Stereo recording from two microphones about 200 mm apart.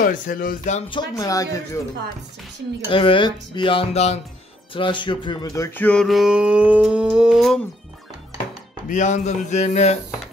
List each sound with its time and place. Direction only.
0.0 s speech: 45° left (ahead or behind); by 1.8 s 15° left (ahead or behind)
2.9 s speech: 25° left (ahead or behind)
4.7 s a sound: 25° left (ahead or behind); by 7.6 s centre (ahead or behind)
8.8 s a man's voice: 40° left (ahead or behind)